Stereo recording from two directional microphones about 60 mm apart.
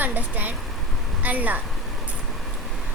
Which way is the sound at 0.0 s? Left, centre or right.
Right.